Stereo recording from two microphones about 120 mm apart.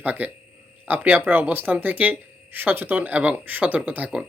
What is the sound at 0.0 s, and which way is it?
Speech, 15° right (ahead or behind).